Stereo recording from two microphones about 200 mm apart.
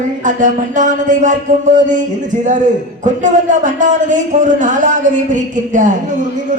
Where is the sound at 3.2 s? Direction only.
40° right (ahead or behind).